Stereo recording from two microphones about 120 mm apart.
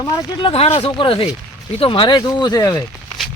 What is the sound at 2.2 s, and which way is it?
Speech, 35° left (ahead or behind).